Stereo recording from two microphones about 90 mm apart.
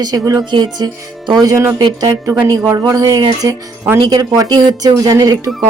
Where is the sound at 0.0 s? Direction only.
45° right (ahead or behind).